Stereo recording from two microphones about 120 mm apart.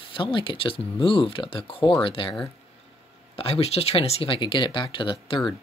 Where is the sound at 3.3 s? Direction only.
55° left (ahead or behind).